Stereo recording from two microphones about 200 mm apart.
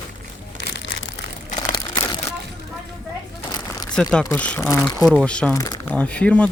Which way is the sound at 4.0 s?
5° left (ahead or behind).